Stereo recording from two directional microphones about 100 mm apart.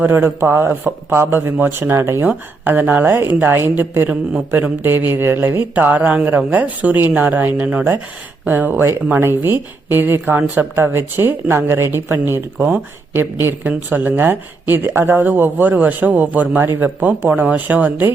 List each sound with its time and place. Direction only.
0.0 s speech: 20° right (ahead or behind)